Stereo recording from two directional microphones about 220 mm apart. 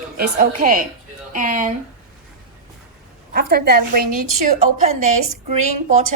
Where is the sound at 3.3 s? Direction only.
45° right (ahead or behind).